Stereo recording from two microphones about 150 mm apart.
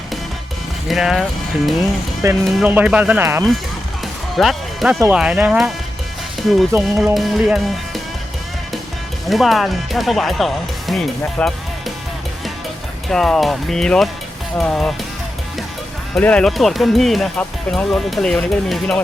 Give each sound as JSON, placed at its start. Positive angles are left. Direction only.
{"t": 0.9, "sound": "speech", "side_deg": 0}
{"t": 2.2, "sound": "speech", "side_deg": -20}
{"t": 4.4, "sound": "speech", "side_deg": 0}
{"t": 6.7, "sound": "speech", "side_deg": -15}
{"t": 7.0, "sound": "speech", "side_deg": 0}
{"t": 9.3, "sound": "speech", "side_deg": 0}
{"t": 13.1, "sound": "speech", "side_deg": 5}
{"t": 16.2, "sound": "speech", "side_deg": 5}